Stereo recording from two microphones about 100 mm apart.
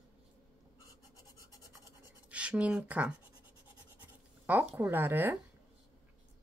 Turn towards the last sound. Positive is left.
turn(degrees=-20)  # may be behind; listen again after turning